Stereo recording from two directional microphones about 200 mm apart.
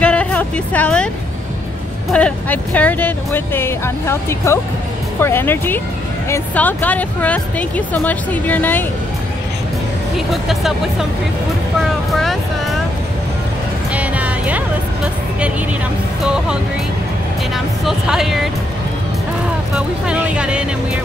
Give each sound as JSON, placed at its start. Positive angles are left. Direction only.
{"t": 0.0, "sound": "vehicle", "side_deg": 5}
{"t": 2.1, "sound": "speech", "side_deg": 5}
{"t": 10.1, "sound": "speech", "side_deg": 0}
{"t": 13.9, "sound": "music", "side_deg": -5}
{"t": 17.8, "sound": "speech", "side_deg": 0}
{"t": 19.7, "sound": "speech", "side_deg": -5}